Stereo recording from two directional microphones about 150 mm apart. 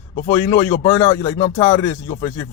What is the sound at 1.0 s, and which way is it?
Speech, 20° left (ahead or behind).